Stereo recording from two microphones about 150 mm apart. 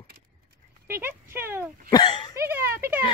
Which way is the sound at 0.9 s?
15° right (ahead or behind).